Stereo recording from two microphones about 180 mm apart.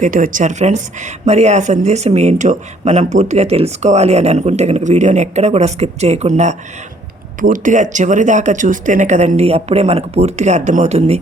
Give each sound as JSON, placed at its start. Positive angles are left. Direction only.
{"t": 0.0, "sound": "speech", "side_deg": -45}